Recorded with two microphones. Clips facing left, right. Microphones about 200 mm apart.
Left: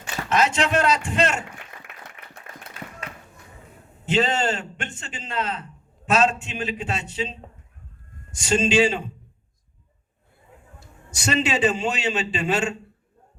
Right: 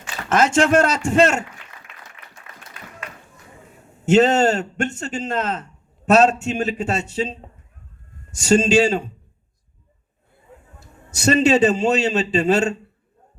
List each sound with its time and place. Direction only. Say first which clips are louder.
0.3 s a man's voice: right 5 dB; 45° right (ahead or behind)
2.2 s applause: left 1 dB; 60° left (ahead or behind)
4.0 s a man's voice: right 8 dB; 45° right (ahead or behind)
8.4 s a man's voice: right 4 dB; 45° right (ahead or behind)
11.2 s a man's voice: right 7 dB; 40° right (ahead or behind)